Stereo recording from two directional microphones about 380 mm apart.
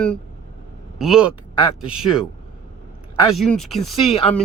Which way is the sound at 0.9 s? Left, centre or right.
Centre.